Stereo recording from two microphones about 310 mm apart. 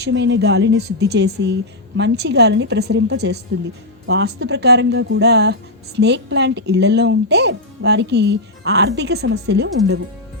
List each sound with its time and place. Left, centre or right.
0.0 s speech: right